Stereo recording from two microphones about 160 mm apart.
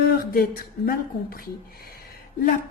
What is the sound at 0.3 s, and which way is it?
Speech, 70° left (ahead or behind).